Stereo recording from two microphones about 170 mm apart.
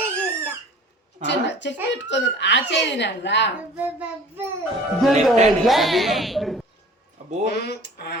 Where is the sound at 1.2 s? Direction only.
90° left.